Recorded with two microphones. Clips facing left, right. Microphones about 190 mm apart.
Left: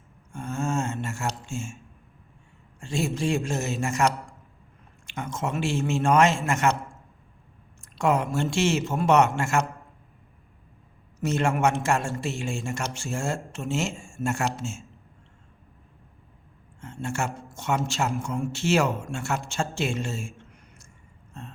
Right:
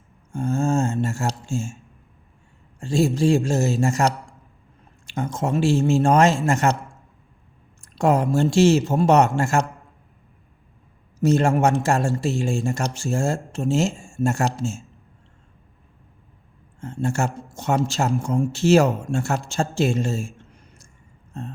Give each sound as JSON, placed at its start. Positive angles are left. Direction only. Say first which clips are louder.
{"t": 0.3, "sound": "speech", "louder": "right 7 dB", "side_deg": -35}
{"t": 2.8, "sound": "speech", "louder": "right 8 dB", "side_deg": -35}
{"t": 7.8, "sound": "speech", "louder": "right 4 dB", "side_deg": -35}
{"t": 11.2, "sound": "speech", "louder": "right 6 dB", "side_deg": -35}
{"t": 16.8, "sound": "speech", "louder": "right 6 dB", "side_deg": -35}
{"t": 21.3, "sound": "a sound", "louder": "right 8 dB", "side_deg": -35}